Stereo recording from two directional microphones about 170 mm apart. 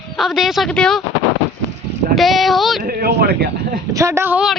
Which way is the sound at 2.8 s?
60° right (ahead or behind).